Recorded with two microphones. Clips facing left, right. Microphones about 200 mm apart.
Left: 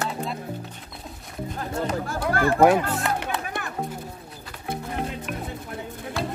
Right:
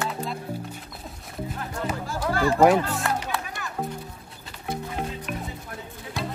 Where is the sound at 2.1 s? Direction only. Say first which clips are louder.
Right 1 dB; 55° left (ahead or behind).